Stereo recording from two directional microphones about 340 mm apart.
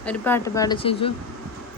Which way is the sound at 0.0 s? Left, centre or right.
Centre.